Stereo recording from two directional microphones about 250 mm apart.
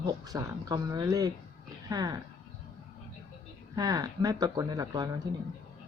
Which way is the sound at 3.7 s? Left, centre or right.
Centre.